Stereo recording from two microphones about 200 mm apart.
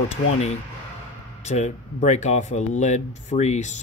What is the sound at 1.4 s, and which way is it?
Speech, 35° left (ahead or behind).